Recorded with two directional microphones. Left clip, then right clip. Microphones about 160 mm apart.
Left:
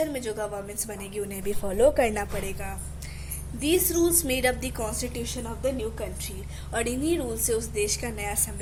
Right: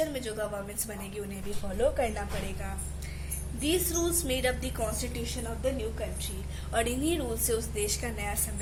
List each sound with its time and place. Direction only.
0.0 s a woman's voice: 45° left (ahead or behind)
1.8 s a woman's voice: 60° left (ahead or behind)
6.7 s a woman's voice: 35° left (ahead or behind)